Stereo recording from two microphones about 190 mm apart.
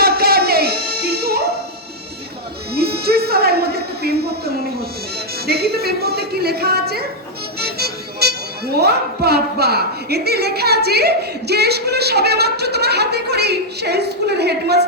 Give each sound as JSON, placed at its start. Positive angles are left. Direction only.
{"t": 0.0, "sound": "music", "side_deg": -55}
{"t": 2.7, "sound": "a sound", "side_deg": -55}
{"t": 5.5, "sound": "music", "side_deg": -55}
{"t": 8.7, "sound": "a woman's voice", "side_deg": -60}